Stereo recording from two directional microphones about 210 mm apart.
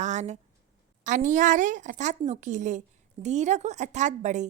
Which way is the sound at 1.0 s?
35° right (ahead or behind).